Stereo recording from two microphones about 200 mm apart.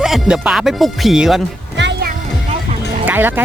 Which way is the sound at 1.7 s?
60° right (ahead or behind).